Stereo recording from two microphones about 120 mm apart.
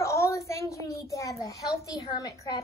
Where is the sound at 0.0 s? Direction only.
25° left (ahead or behind).